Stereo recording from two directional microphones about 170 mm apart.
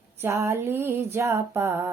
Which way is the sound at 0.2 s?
15° right (ahead or behind).